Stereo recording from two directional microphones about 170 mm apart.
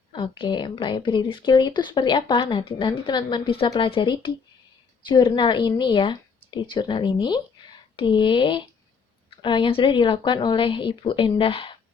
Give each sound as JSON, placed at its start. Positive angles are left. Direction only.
{"t": 0.1, "sound": "speech", "side_deg": 30}